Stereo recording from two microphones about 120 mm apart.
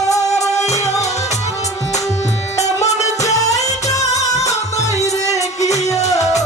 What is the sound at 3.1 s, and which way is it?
Music, 70° left (ahead or behind).